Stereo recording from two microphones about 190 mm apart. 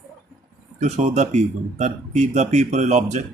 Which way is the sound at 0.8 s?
40° right (ahead or behind).